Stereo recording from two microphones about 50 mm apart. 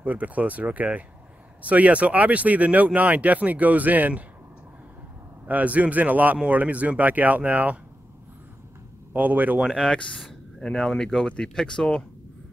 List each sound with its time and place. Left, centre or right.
0.0 s speech: right
5.5 s speech: right
9.1 s speech: right
10.6 s speech: centre